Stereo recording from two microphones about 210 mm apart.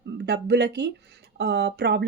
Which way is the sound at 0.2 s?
50° right (ahead or behind).